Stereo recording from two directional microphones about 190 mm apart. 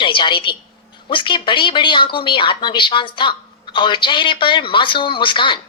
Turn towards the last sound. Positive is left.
turn(degrees=25)  # may be behind; listen again after turning